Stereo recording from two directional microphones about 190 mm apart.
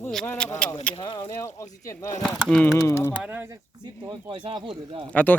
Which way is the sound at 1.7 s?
15° left (ahead or behind).